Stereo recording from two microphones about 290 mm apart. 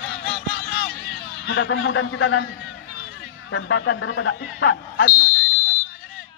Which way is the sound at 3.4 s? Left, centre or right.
Left.